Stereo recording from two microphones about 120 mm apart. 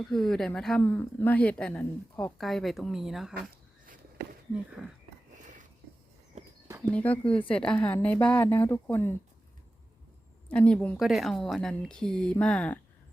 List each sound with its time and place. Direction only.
0.0 s speech: 5° left (ahead or behind)
0.8 s speech: 15° left (ahead or behind)
2.4 s speech: centre (ahead or behind)
4.5 s speech: 5° right (ahead or behind)
6.9 s speech: 10° left (ahead or behind)
10.5 s speech: 10° left (ahead or behind)
11.0 s speech: centre (ahead or behind)